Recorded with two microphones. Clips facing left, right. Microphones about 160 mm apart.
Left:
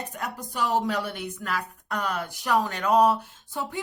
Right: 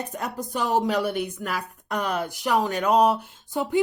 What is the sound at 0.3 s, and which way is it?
Speech, 20° right (ahead or behind).